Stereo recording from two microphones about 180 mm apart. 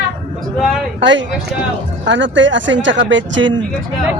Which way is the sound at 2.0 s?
90° right.